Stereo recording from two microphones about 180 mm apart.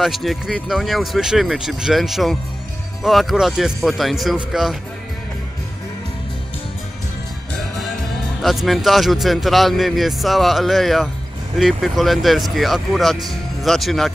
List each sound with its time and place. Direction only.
0.0 s a man's voice: centre (ahead or behind)
8.4 s a man's voice: centre (ahead or behind)